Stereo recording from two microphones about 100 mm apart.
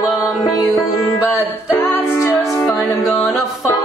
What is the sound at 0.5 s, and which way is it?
Music, 35° left (ahead or behind).